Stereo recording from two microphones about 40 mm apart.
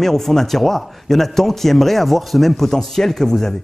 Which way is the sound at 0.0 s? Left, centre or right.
Centre.